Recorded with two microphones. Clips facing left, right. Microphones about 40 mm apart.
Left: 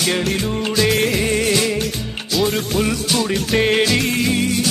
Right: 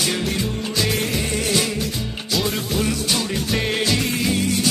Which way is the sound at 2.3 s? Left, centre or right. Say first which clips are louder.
Left 4 dB; centre.